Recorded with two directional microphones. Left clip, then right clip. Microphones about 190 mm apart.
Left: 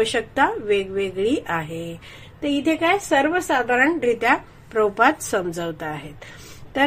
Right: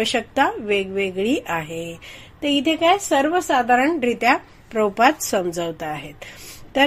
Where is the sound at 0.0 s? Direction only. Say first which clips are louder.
Even; 40° right (ahead or behind).